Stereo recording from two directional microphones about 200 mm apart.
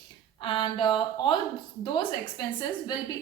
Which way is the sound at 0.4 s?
25° left (ahead or behind).